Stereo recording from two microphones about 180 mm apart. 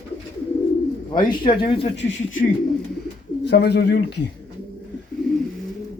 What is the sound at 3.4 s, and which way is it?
Speech, 65° left (ahead or behind).